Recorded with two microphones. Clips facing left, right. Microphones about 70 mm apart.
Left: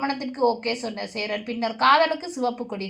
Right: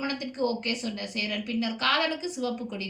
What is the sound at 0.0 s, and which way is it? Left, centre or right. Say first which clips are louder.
A woman's voice: left 6 dB; left.